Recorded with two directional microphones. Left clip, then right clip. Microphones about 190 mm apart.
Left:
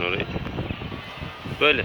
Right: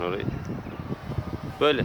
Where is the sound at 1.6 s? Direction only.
25° right (ahead or behind).